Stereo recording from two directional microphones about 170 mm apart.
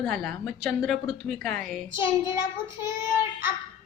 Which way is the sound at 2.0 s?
15° right (ahead or behind).